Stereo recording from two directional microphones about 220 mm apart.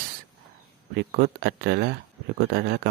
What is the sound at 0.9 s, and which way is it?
Speech, 45° right (ahead or behind).